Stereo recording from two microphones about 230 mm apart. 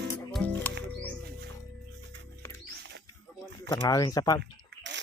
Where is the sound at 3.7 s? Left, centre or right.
Centre.